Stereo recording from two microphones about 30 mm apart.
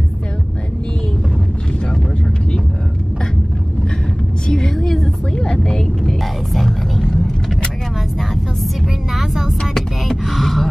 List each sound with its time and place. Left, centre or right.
4.5 s vehicle: left
5.3 s vehicle: left
9.1 s vehicle: centre
10.0 s gasp: centre